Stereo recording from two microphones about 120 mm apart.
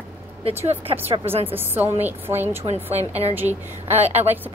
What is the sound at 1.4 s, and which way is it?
A woman's voice, 15° right (ahead or behind).